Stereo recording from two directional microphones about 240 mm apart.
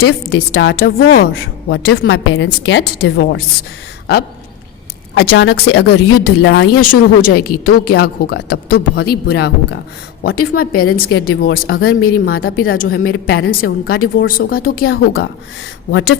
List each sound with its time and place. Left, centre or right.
0.0 s a woman's voice: left
5.1 s a woman's voice: left